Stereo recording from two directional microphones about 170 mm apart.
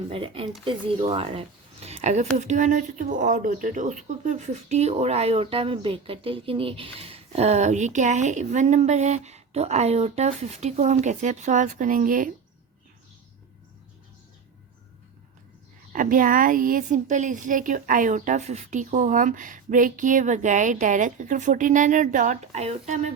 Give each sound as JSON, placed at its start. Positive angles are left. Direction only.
{"t": 0.1, "sound": "speech", "side_deg": -30}
{"t": 15.9, "sound": "a woman's voice", "side_deg": -50}